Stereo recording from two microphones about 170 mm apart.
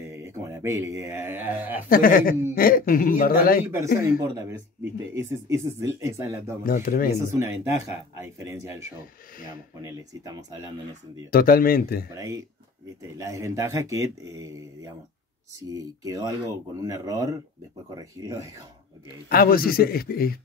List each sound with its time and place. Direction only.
0.0 s speech: 15° right (ahead or behind)
1.9 s a man's voice: 55° left (ahead or behind)
3.6 s speech: 15° right (ahead or behind)
6.6 s a man's voice: 55° left (ahead or behind)
7.3 s speech: 15° right (ahead or behind)
11.2 s a man's voice: 60° left (ahead or behind)
13.2 s speech: 20° right (ahead or behind)
15.7 s speech: 20° right (ahead or behind)
19.2 s a man's voice: 60° left (ahead or behind)